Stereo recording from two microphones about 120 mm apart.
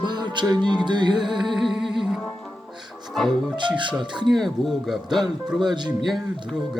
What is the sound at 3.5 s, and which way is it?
Music, 40° right (ahead or behind).